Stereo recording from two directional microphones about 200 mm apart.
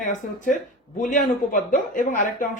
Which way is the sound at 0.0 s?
40° left (ahead or behind).